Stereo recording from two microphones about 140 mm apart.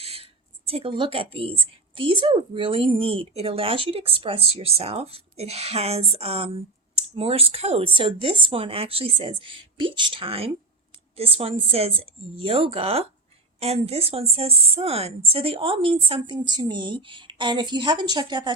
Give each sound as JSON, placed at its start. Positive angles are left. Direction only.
{"t": 0.0, "sound": "speech", "side_deg": -45}